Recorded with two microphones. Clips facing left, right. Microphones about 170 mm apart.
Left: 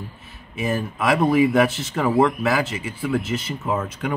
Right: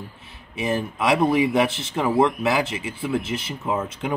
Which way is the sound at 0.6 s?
15° right (ahead or behind).